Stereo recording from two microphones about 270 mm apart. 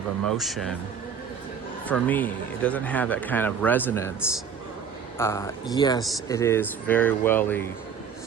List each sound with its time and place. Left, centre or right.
0.3 s a man's voice: centre
1.9 s a man's voice: centre
5.1 s a man's voice: centre